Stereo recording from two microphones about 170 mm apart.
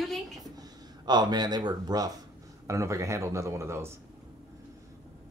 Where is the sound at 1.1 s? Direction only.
25° right (ahead or behind).